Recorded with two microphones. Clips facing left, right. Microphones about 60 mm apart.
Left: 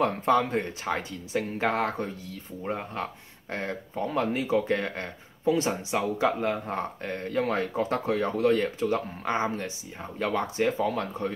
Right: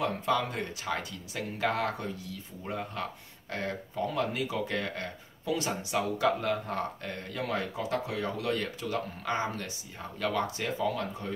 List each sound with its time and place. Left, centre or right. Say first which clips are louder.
0.0 s speech: left 6 dB; left